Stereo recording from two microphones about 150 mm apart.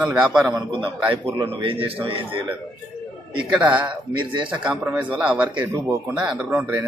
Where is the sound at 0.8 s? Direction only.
35° right (ahead or behind).